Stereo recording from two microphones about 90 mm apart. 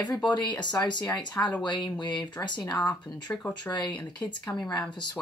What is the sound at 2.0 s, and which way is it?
Speech, 55° left (ahead or behind).